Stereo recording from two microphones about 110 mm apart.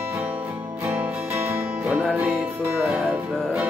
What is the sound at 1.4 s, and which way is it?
Music, 15° right (ahead or behind).